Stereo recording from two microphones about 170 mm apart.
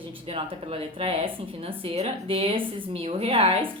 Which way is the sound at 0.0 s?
30° right (ahead or behind).